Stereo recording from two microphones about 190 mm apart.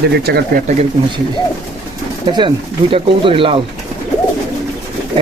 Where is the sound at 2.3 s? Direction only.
25° right (ahead or behind).